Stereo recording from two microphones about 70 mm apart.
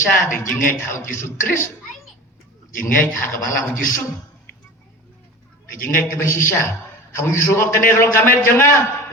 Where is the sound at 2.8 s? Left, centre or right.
Left.